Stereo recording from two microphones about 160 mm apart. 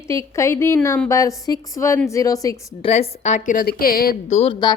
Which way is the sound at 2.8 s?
40° left (ahead or behind).